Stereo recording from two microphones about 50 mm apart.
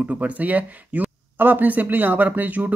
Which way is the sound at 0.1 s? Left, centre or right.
Right.